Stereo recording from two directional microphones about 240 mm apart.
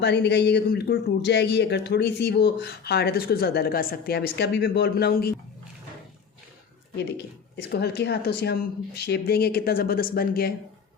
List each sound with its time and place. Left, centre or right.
0.0 s a man's voice: left
7.5 s a woman's voice: left